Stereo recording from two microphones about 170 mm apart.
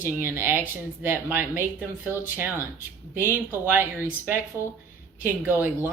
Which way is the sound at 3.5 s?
10° right (ahead or behind).